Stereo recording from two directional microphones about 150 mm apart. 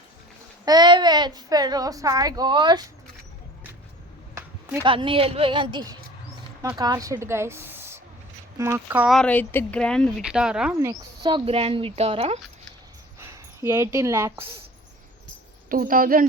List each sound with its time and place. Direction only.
0.6 s a child's voice: 25° right (ahead or behind)
4.4 s a sound: 15° right (ahead or behind)
4.8 s a woman's voice: 35° right (ahead or behind); by 9.0 s 15° right (ahead or behind)
9.0 s speech: 5° left (ahead or behind)
10.2 s speech: 5° right (ahead or behind)
10.8 s speech: 25° right (ahead or behind)
13.1 s speech: 20° right (ahead or behind)
15.7 s a woman's voice: 70° right (ahead or behind)